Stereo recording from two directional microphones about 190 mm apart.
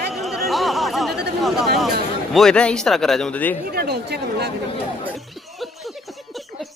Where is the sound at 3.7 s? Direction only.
55° right (ahead or behind).